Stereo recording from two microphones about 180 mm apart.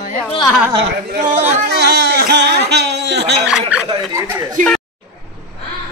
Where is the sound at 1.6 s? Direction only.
65° right (ahead or behind).